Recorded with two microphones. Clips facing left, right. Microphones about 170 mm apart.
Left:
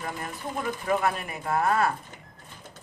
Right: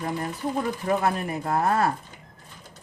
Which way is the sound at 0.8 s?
35° right (ahead or behind).